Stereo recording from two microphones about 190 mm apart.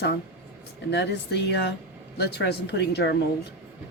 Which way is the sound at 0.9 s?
65° left (ahead or behind).